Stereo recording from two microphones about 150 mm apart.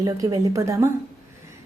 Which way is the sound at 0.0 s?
25° right (ahead or behind).